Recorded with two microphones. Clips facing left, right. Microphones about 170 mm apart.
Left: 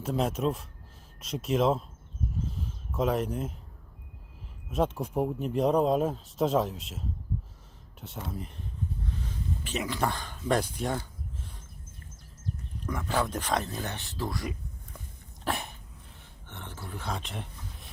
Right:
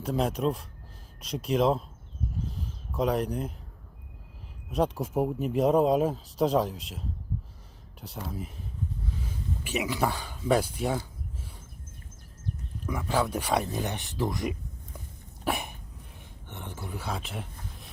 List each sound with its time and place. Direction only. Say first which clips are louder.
0.0 s speech: right 1 dB; centre (ahead or behind)
2.4 s a sound: left 1 dB; centre (ahead or behind)
4.7 s speech: right 1 dB; centre (ahead or behind)
8.0 s speech: right 1 dB; centre (ahead or behind)
9.6 s speech: right 2 dB; 10° right (ahead or behind)
12.8 s speech: right 2 dB; 10° right (ahead or behind)
15.4 s cough: right 2 dB; 10° right (ahead or behind)
16.5 s a sound: right 3 dB; 15° right (ahead or behind)